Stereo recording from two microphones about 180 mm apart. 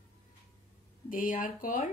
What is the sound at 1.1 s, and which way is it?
Speech, 50° left (ahead or behind).